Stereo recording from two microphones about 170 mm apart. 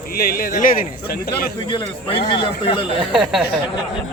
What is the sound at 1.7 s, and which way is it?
A man's voice, 30° left (ahead or behind).